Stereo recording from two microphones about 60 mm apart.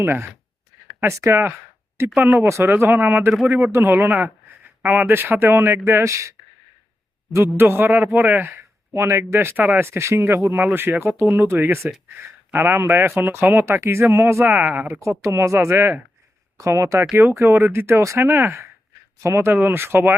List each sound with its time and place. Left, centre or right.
0.0 s speech: right
1.0 s speech: right
2.1 s speech: right
2.5 s speech: right
5.1 s speech: right
7.3 s speech: right
8.5 s speech: right
13.7 s speech: right
14.4 s speech: right
15.0 s speech: right
17.4 s speech: right
19.5 s speech: right